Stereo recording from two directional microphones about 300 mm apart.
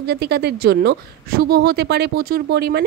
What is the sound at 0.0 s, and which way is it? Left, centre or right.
A woman's voice, right.